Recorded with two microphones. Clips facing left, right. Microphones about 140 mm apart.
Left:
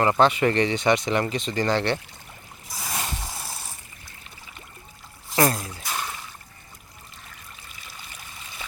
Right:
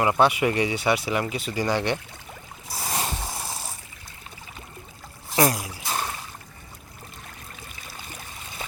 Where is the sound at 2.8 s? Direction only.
35° right (ahead or behind).